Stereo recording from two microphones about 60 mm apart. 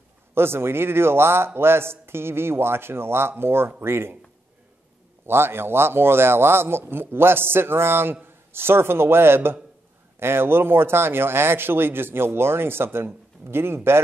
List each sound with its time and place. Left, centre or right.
0.3 s speech: right
5.2 s a man's voice: right